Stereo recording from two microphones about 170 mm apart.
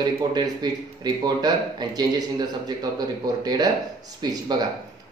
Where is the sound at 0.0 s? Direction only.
25° right (ahead or behind).